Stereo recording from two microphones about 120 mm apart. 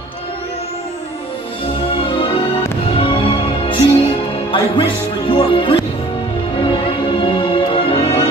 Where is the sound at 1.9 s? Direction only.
45° left (ahead or behind).